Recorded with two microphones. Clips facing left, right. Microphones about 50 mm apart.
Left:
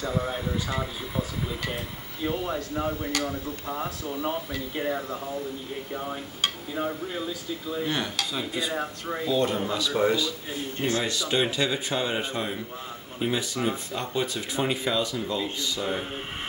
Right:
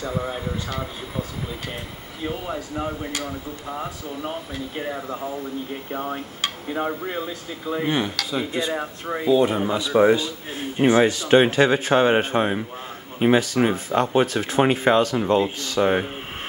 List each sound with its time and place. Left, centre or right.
0.0 s speech: centre
2.2 s speech: centre
6.7 s a man's voice: right
13.2 s speech: right
13.6 s speech: right